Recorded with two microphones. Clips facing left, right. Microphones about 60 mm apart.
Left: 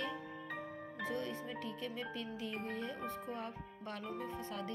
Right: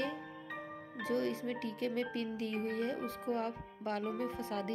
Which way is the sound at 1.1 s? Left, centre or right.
Right.